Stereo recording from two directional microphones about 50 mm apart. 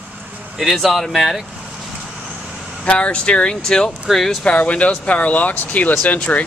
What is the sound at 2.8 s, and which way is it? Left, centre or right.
Speech, left.